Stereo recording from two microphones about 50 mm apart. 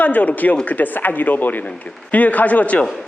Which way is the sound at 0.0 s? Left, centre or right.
Left.